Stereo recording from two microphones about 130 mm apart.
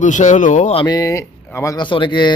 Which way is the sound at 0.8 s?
30° left (ahead or behind).